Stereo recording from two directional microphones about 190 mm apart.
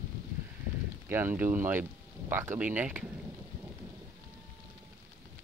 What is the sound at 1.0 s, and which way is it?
Speech, 10° right (ahead or behind).